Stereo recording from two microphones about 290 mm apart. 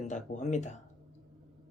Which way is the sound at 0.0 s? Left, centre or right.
Left.